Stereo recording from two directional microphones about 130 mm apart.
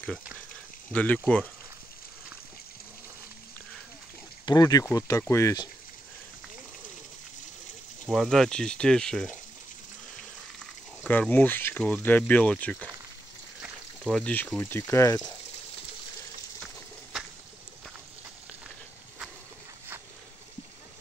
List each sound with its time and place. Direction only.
0.9 s speech: 10° left (ahead or behind)
4.5 s speech: 30° left (ahead or behind)
8.1 s speech: centre (ahead or behind)
11.1 s speech: 10° left (ahead or behind)
14.1 s speech: 10° left (ahead or behind); by 15.3 s 25° left (ahead or behind)